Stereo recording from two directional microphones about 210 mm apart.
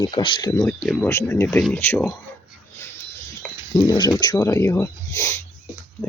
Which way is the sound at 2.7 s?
10° left (ahead or behind).